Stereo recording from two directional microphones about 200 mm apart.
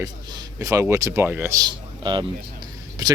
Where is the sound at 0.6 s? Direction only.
15° right (ahead or behind).